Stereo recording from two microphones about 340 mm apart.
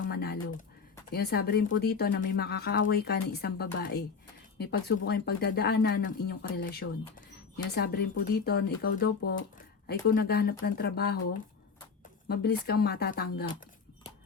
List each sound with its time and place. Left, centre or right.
0.1 s speech: left
12.3 s speech: left